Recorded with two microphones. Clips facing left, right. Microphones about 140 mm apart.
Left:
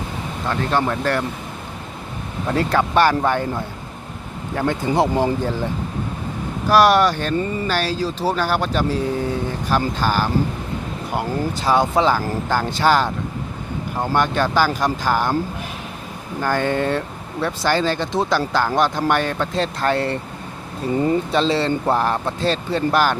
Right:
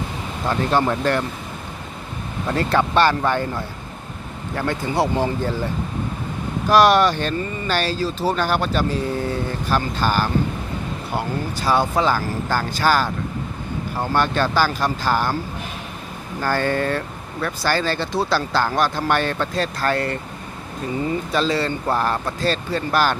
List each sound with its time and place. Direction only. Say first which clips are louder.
0.4 s speech: right 1 dB; 5° right (ahead or behind)
2.5 s speech: left 1 dB; 10° left (ahead or behind)
6.7 s speech: even; 10° left (ahead or behind)
16.4 s speech: left 1 dB; 15° left (ahead or behind)
19.6 s speech: left 3 dB; 25° left (ahead or behind)
21.3 s speech: left 2 dB; 25° left (ahead or behind)